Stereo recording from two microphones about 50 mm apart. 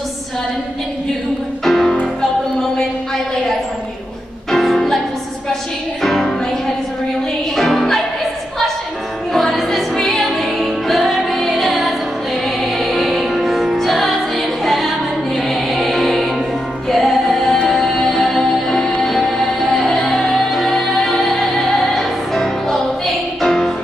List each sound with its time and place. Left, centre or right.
1.6 s music: centre
4.5 s music: centre
6.0 s music: centre
7.5 s music: centre
9.3 s music: centre